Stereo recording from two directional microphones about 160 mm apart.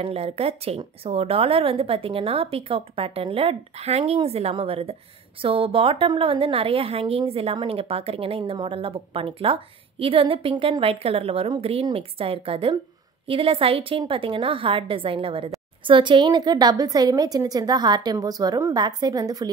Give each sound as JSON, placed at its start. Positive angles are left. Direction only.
{"t": 0.0, "sound": "a woman's voice", "side_deg": -40}